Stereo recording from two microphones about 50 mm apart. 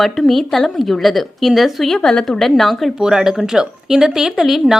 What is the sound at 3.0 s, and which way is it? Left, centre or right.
Speech, centre.